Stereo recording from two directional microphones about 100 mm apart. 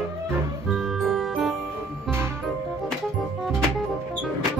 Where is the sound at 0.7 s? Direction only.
Centre (ahead or behind).